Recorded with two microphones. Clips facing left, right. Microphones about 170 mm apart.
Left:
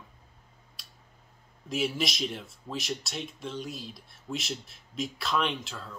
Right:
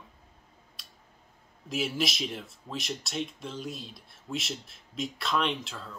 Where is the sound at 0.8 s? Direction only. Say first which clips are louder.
Even; centre (ahead or behind).